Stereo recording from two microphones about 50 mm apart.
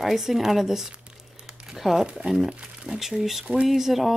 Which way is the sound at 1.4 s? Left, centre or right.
Centre.